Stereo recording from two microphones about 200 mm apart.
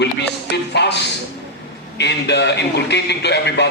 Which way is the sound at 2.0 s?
60° left (ahead or behind).